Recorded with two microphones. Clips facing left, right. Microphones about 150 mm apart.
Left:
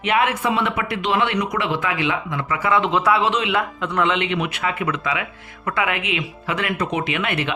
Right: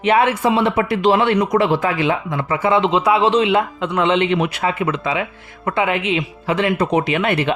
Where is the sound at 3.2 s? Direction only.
30° right (ahead or behind).